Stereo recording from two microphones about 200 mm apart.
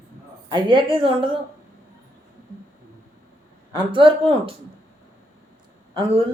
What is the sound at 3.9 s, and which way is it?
Speech, 25° right (ahead or behind).